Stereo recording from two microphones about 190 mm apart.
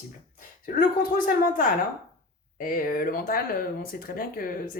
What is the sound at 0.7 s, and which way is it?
Speech, 45° left (ahead or behind).